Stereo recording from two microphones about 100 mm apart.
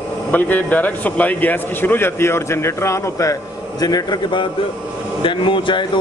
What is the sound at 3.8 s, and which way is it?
A man's voice, 45° left (ahead or behind).